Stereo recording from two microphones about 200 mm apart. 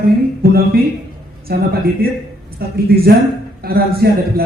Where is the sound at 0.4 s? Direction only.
50° right (ahead or behind).